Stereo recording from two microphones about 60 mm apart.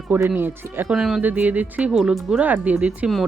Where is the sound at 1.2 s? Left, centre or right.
Right.